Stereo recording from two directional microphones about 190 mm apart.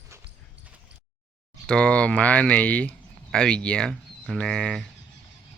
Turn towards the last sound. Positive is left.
turn(degrees=5)  # may be behind; listen again after turning